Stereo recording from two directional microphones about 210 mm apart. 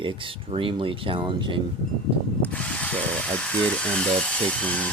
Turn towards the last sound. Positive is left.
turn(degrees=5)  # may be behind; listen again after turning